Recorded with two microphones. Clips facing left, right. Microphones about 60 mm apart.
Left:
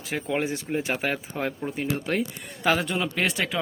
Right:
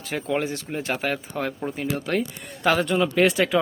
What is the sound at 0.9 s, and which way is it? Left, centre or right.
A man's voice, centre.